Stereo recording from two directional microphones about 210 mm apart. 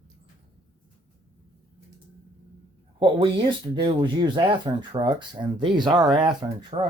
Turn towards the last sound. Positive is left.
turn(degrees=-20)  # may be behind; listen again after turning